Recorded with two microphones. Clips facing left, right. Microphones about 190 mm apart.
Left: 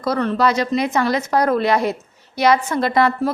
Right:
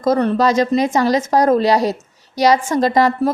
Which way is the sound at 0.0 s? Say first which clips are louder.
Right 3 dB; 45° right (ahead or behind).